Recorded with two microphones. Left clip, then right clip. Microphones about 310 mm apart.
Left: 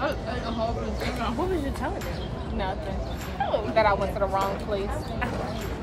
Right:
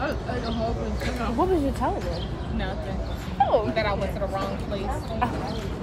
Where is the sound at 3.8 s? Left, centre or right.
Centre.